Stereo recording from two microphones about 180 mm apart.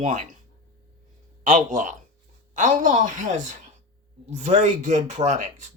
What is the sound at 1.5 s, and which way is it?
Speech, 45° right (ahead or behind).